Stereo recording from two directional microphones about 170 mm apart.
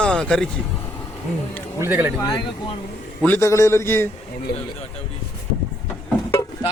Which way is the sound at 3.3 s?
15° left (ahead or behind).